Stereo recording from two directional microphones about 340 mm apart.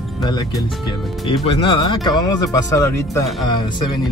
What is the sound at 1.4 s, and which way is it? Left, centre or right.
Speech, centre.